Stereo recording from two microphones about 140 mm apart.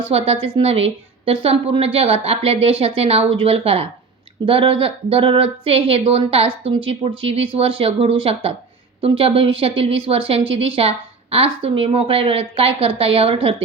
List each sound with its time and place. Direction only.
0.1 s a woman's voice: 45° right (ahead or behind)